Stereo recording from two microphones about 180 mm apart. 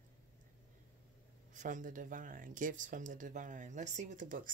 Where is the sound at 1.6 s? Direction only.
45° right (ahead or behind).